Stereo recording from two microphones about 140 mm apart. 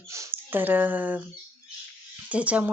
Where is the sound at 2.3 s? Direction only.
10° right (ahead or behind).